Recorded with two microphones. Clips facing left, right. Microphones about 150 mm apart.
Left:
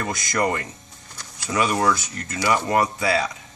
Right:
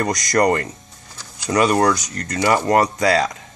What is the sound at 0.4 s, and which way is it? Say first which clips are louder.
Speech: right 6 dB; 60° right (ahead or behind).